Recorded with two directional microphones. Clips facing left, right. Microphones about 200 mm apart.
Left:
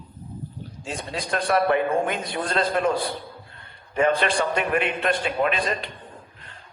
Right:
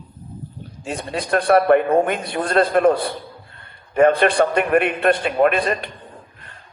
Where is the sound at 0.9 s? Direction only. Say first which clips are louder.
Right 6 dB; 60° right (ahead or behind).